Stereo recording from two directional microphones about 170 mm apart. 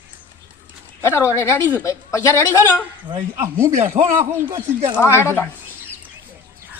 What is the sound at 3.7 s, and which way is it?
Speech, 45° right (ahead or behind).